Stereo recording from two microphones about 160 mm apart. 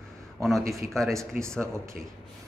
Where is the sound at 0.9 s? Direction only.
Centre (ahead or behind).